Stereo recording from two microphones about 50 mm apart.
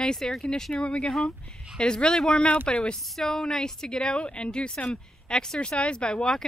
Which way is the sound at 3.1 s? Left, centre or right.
Centre.